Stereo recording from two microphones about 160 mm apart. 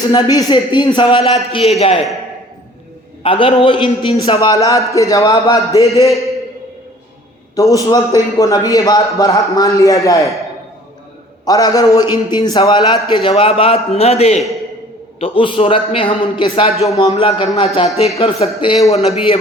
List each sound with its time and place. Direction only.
0.1 s a man's voice: 25° left (ahead or behind)
3.2 s a man's voice: 30° left (ahead or behind)
7.5 s a man's voice: 20° left (ahead or behind)
11.4 s a man's voice: 20° left (ahead or behind)
18.9 s a man's voice: 40° left (ahead or behind)